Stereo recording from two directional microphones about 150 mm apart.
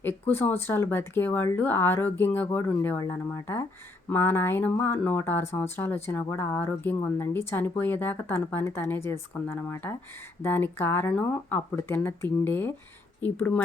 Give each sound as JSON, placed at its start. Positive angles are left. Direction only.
{"t": 0.0, "sound": "speech", "side_deg": 15}